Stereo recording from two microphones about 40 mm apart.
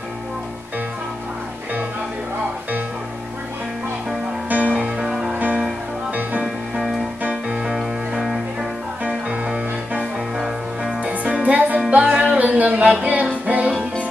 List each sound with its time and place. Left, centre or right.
4.5 s music: right
7.6 s music: centre
9.0 s music: right
10.3 s music: centre
11.0 s music: right
12.0 s music: centre
12.3 s music: right